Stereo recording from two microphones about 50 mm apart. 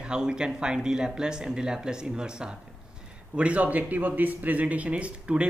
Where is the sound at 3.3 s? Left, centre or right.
Right.